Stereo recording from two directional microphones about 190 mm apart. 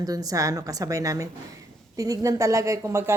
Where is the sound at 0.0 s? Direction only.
20° right (ahead or behind).